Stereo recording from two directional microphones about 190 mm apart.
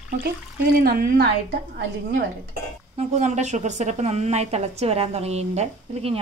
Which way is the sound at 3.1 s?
35° right (ahead or behind).